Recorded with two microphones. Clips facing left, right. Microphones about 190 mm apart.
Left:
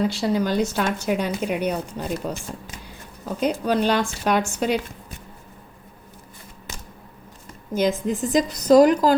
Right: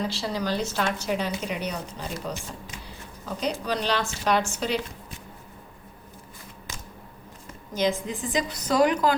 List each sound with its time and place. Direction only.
0.0 s a woman's voice: 50° left (ahead or behind)
3.4 s a woman's voice: 50° left (ahead or behind)
7.7 s a woman's voice: 50° left (ahead or behind)